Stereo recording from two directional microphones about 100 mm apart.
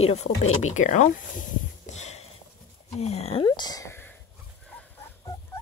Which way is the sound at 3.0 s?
90° left.